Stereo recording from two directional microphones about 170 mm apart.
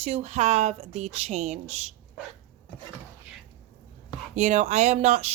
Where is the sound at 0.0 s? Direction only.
40° right (ahead or behind).